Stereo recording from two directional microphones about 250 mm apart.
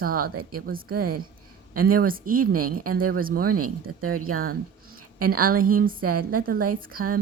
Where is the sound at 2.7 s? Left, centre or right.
Right.